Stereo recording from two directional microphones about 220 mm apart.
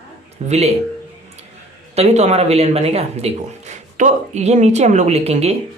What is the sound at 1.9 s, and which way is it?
Speech, 30° right (ahead or behind).